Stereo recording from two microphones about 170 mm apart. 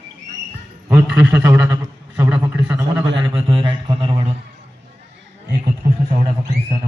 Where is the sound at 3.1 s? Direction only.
30° right (ahead or behind).